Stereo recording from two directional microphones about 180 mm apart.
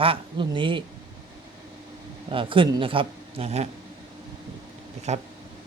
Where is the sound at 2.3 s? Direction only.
30° right (ahead or behind).